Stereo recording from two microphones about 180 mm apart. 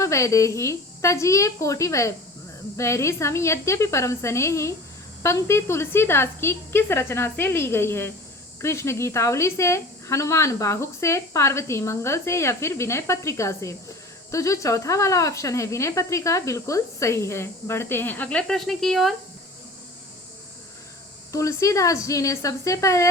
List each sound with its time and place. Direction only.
0.0 s speech: 15° left (ahead or behind); by 19.1 s centre (ahead or behind)
21.3 s speech: 15° left (ahead or behind)